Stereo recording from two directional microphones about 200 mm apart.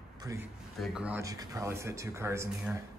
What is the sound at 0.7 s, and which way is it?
Speech, centre (ahead or behind).